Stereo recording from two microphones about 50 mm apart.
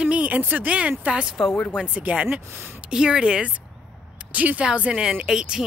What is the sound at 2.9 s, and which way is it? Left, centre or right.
Speech, centre.